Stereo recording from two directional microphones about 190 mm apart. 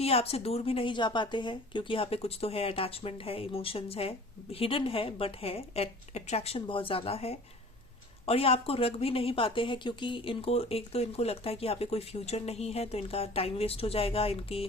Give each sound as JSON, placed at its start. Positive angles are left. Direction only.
{"t": 0.0, "sound": "a woman's voice", "side_deg": 30}